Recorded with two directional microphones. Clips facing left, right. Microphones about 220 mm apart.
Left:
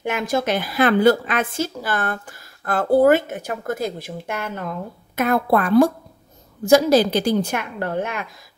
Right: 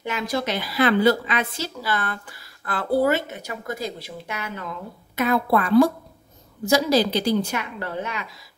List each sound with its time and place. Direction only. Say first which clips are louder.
0.0 s a woman's voice: left 4 dB; 50° left (ahead or behind)